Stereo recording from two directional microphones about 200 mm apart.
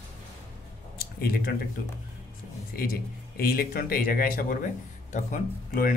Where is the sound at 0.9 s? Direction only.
50° left (ahead or behind).